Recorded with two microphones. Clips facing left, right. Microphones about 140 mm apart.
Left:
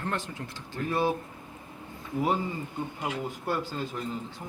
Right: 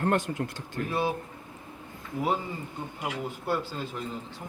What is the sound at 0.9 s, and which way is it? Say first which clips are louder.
Speech: left 2 dB; 5° right (ahead or behind).